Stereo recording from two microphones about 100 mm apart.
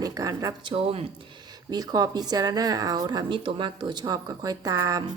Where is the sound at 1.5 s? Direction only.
40° right (ahead or behind).